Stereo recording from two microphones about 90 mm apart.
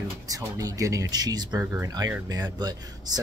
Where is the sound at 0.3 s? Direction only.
40° right (ahead or behind).